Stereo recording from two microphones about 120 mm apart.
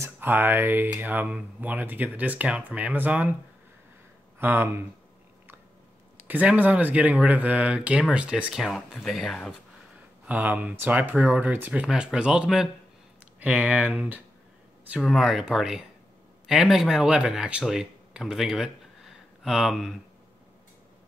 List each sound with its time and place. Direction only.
0.0 s speech: 15° right (ahead or behind)
4.4 s speech: 20° right (ahead or behind)
6.2 s speech: 15° right (ahead or behind)
10.2 s speech: 15° right (ahead or behind)
15.0 s speech: centre (ahead or behind)